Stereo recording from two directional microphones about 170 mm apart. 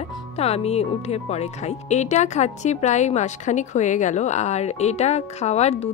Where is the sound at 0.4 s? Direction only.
40° left (ahead or behind).